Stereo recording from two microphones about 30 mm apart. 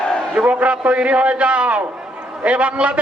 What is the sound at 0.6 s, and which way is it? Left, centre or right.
A man's voice, right.